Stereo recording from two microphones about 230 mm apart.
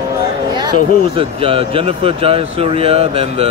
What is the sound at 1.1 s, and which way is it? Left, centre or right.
Speech, right.